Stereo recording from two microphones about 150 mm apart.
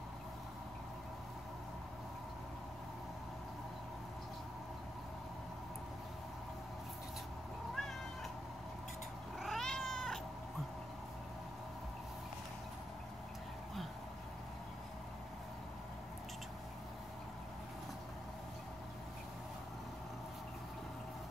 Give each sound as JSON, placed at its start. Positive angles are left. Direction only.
{"t": 7.7, "sound": "cat", "side_deg": 0}
{"t": 9.4, "sound": "cat", "side_deg": 0}